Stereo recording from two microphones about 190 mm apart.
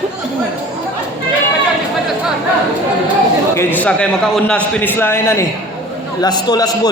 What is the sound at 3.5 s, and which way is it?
A man's voice, 10° left (ahead or behind).